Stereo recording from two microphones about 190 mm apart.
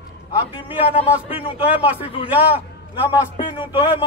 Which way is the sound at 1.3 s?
30° left (ahead or behind).